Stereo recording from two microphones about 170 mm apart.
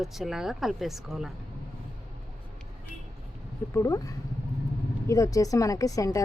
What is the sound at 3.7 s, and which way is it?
Speech, 20° left (ahead or behind).